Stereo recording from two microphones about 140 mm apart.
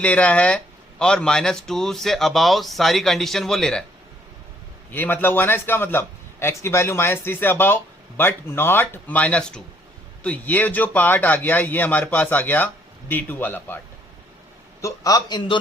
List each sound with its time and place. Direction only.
0.0 s speech: 10° left (ahead or behind)
4.9 s a man's voice: 15° left (ahead or behind)
14.8 s a man's voice: 25° left (ahead or behind)